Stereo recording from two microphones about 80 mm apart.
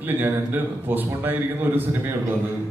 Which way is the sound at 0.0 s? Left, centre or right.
Right.